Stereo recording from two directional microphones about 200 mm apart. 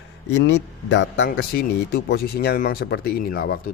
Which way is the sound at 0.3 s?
65° left (ahead or behind).